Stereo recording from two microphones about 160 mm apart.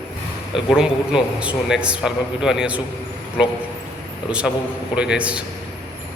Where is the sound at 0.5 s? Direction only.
5° right (ahead or behind).